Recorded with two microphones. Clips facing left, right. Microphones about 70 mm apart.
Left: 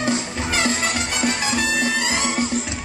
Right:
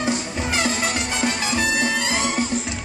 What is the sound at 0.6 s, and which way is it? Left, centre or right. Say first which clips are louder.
Music: left 2 dB; left.